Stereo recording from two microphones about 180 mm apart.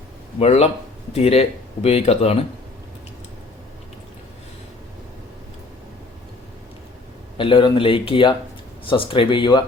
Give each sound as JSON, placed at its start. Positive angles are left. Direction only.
{"t": 0.3, "sound": "speech", "side_deg": 35}
{"t": 7.3, "sound": "speech", "side_deg": 30}